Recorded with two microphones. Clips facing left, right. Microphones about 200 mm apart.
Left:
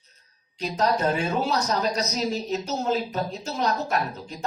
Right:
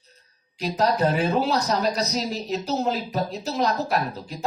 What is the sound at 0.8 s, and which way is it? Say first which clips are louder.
Speech: right 2 dB; 35° right (ahead or behind).